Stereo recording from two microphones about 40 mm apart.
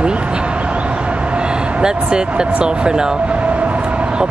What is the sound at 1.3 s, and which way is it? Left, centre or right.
Speech, right.